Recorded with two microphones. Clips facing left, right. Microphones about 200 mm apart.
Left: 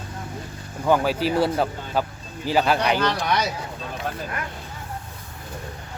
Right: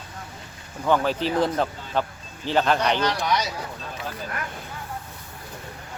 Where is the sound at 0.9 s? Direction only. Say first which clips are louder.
Left 2 dB; 10° left (ahead or behind).